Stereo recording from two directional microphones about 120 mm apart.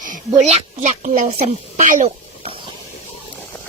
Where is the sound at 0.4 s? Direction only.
75° right (ahead or behind); by 2.0 s 90° right.